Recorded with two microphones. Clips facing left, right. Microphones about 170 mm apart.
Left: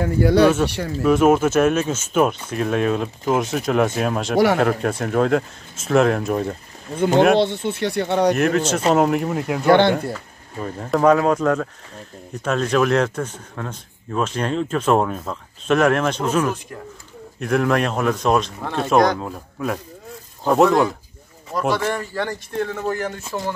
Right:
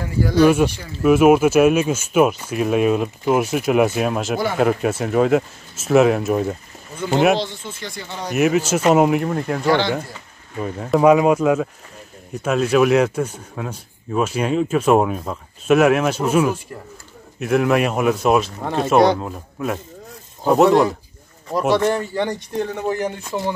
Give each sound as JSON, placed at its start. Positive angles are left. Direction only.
{"t": 0.0, "sound": "speech", "side_deg": 65}
{"t": 1.0, "sound": "speech", "side_deg": -10}
{"t": 7.3, "sound": "speech", "side_deg": 65}
{"t": 8.3, "sound": "speech", "side_deg": -5}
{"t": 9.7, "sound": "speech", "side_deg": 55}
{"t": 10.6, "sound": "speech", "side_deg": -5}
{"t": 21.8, "sound": "speech", "side_deg": -25}